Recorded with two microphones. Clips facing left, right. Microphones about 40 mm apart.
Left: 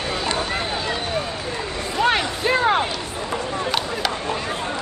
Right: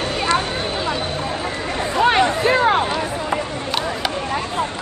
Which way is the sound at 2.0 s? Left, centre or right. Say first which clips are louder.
Right 2 dB; right.